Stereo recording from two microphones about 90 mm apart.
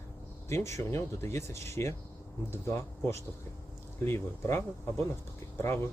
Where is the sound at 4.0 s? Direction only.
30° left (ahead or behind).